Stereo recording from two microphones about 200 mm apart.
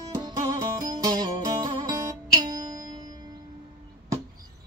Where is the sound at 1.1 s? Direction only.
20° right (ahead or behind).